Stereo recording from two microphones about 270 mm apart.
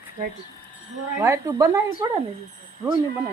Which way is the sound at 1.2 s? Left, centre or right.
Centre.